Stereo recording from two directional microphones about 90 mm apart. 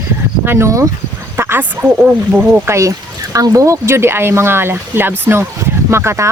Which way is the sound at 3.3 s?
40° right (ahead or behind).